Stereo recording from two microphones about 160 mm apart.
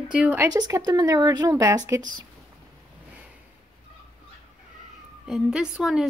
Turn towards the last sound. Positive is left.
turn(degrees=-5)  # may be behind; listen again after turning